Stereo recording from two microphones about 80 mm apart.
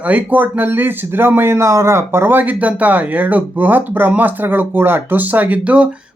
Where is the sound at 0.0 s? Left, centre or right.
Right.